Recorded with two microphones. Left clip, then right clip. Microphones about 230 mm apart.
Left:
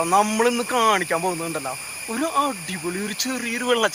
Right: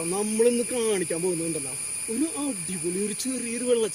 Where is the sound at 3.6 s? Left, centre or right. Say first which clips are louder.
Left 3 dB; left.